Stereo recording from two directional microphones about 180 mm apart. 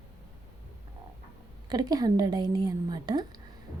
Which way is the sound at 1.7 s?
20° right (ahead or behind).